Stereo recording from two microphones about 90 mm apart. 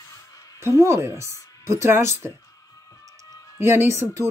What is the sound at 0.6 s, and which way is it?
Speech, 30° right (ahead or behind).